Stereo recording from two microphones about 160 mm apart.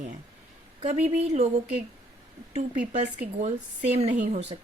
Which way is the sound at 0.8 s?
40° right (ahead or behind).